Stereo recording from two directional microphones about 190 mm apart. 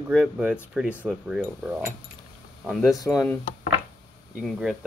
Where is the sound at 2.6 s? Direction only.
Centre (ahead or behind).